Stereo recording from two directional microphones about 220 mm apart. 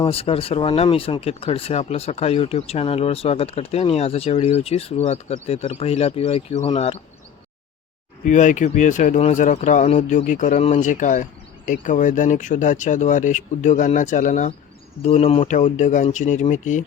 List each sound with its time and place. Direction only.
0.0 s speech: 25° left (ahead or behind)
8.2 s speech: 35° left (ahead or behind)